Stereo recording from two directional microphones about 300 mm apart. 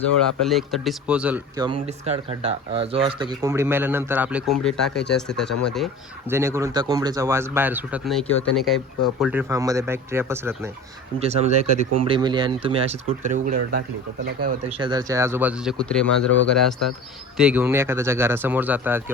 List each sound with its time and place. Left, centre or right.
0.2 s speech: centre
1.6 s speech: centre
11.2 s speech: right
14.8 s speech: centre